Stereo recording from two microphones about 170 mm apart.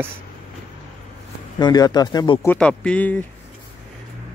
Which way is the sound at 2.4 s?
10° left (ahead or behind).